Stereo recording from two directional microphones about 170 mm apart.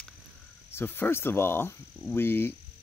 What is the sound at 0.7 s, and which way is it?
Speech, 15° left (ahead or behind).